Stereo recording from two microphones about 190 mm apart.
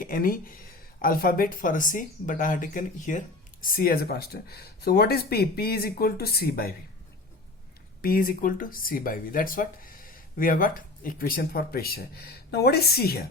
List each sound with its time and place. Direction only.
0.0 s speech: 45° left (ahead or behind)
8.0 s speech: 45° left (ahead or behind)